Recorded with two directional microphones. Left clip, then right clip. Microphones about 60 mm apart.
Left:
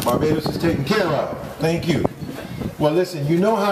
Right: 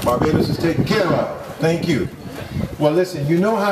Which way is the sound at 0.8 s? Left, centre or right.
Left.